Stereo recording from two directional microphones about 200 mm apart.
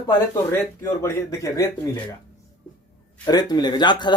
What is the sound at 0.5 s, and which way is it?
Speech, 15° left (ahead or behind).